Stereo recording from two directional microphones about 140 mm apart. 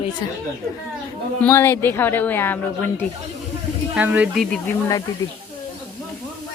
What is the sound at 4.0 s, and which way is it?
Speech, 10° right (ahead or behind).